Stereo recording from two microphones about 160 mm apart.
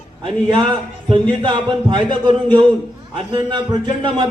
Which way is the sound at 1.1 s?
30° right (ahead or behind).